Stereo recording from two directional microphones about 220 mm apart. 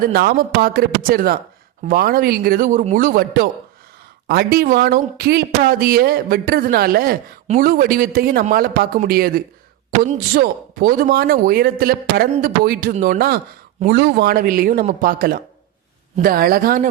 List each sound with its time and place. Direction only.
0.0 s a woman's voice: 45° right (ahead or behind)